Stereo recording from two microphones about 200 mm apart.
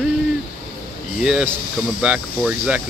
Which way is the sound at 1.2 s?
5° right (ahead or behind).